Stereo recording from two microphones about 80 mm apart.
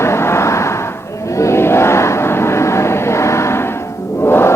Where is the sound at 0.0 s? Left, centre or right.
Left.